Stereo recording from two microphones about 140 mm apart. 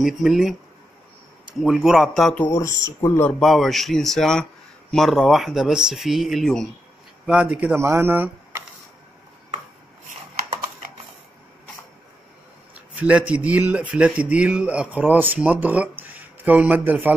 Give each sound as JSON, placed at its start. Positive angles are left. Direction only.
{"t": 0.0, "sound": "speech", "side_deg": 0}
{"t": 1.6, "sound": "speech", "side_deg": 0}
{"t": 2.4, "sound": "speech", "side_deg": 20}
{"t": 3.3, "sound": "speech", "side_deg": 0}
{"t": 7.7, "sound": "speech", "side_deg": -20}
{"t": 12.9, "sound": "speech", "side_deg": -10}